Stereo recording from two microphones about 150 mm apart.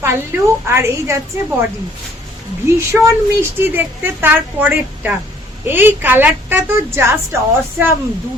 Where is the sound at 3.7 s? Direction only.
15° right (ahead or behind).